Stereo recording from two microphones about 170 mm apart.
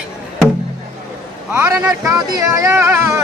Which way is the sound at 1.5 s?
10° right (ahead or behind).